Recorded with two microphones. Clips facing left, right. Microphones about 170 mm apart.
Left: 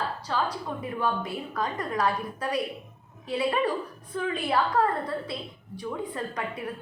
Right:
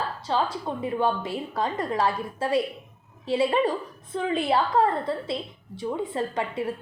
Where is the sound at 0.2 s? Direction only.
25° right (ahead or behind).